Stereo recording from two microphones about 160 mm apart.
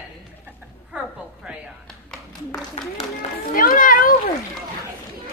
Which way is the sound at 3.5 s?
60° left (ahead or behind).